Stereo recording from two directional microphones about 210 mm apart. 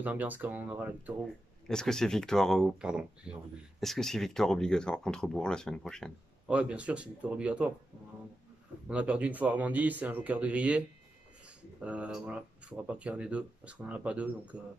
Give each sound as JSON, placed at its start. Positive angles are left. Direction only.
{"t": 0.0, "sound": "speech", "side_deg": -10}
{"t": 1.7, "sound": "speech", "side_deg": 5}
{"t": 8.8, "sound": "speech", "side_deg": -5}